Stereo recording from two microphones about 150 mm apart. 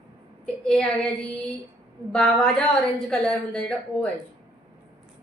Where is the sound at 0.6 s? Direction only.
5° left (ahead or behind).